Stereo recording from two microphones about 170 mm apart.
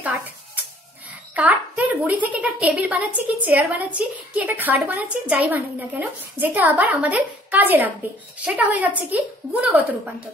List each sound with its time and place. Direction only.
1.3 s a woman's voice: 10° right (ahead or behind)